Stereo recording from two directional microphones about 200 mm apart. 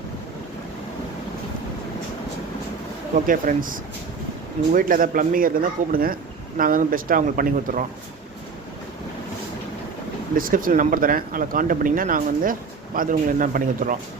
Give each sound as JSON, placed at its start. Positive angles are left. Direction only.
{"t": 3.2, "sound": "speech", "side_deg": -45}
{"t": 10.3, "sound": "speech", "side_deg": -45}